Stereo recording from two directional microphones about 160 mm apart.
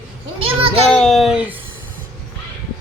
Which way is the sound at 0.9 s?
5° left (ahead or behind).